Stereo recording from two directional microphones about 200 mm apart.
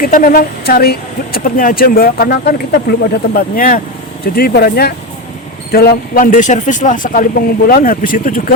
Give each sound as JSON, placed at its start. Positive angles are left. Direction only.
{"t": 0.0, "sound": "speech", "side_deg": 40}